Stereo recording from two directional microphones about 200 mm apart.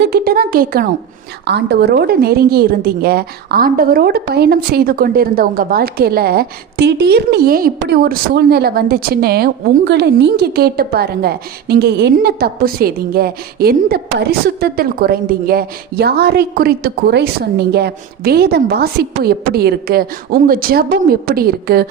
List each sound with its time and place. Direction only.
0.0 s a woman's voice: 50° right (ahead or behind)
1.5 s a woman's voice: 55° right (ahead or behind)